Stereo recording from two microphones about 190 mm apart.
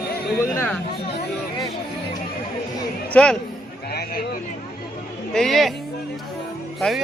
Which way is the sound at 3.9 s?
55° left (ahead or behind).